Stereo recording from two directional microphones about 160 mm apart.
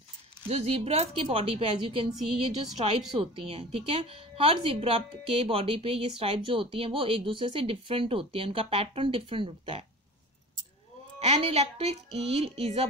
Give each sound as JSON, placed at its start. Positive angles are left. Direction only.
{"t": 0.5, "sound": "a woman's voice", "side_deg": -40}
{"t": 3.2, "sound": "a woman's voice", "side_deg": -35}
{"t": 11.1, "sound": "a woman's voice", "side_deg": -40}